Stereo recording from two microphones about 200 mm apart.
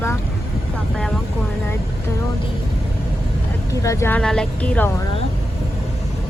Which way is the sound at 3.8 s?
15° left (ahead or behind).